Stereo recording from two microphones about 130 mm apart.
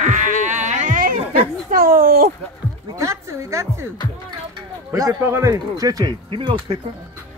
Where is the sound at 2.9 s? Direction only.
20° right (ahead or behind).